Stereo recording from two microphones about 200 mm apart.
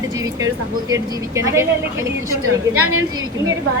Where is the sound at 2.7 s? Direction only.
90° right.